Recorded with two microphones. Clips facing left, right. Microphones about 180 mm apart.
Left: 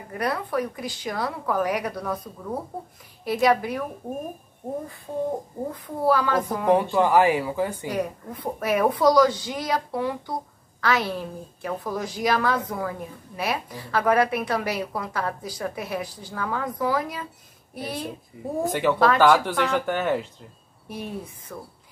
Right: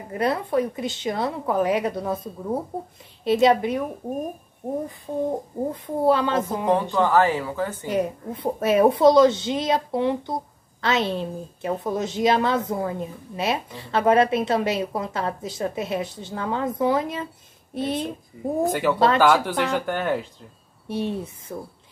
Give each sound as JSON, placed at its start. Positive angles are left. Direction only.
{"t": 0.1, "sound": "a woman's voice", "side_deg": -25}
{"t": 5.7, "sound": "a woman's voice", "side_deg": -25}
{"t": 6.7, "sound": "a woman's voice", "side_deg": 15}
{"t": 7.9, "sound": "a woman's voice", "side_deg": -25}
{"t": 18.3, "sound": "speech", "side_deg": 5}
{"t": 20.9, "sound": "a woman's voice", "side_deg": -25}